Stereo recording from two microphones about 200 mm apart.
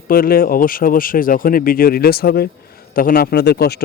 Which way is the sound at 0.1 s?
45° left (ahead or behind).